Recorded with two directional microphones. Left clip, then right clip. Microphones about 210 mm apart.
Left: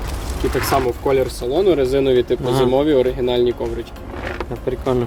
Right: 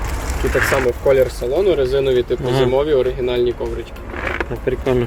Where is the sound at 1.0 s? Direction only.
45° left (ahead or behind).